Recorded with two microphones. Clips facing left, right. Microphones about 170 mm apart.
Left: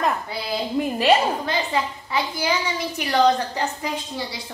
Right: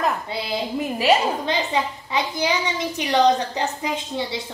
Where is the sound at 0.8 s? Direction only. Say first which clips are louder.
Left 6 dB; 5° right (ahead or behind).